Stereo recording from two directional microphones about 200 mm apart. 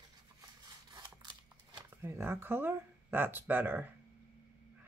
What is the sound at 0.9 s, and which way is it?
Scissors, 20° right (ahead or behind).